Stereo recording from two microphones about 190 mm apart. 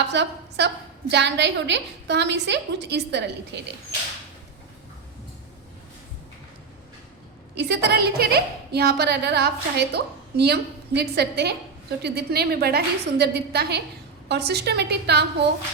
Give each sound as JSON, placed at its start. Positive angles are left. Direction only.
{"t": 0.1, "sound": "a woman's voice", "side_deg": -65}
{"t": 7.5, "sound": "a woman's voice", "side_deg": -60}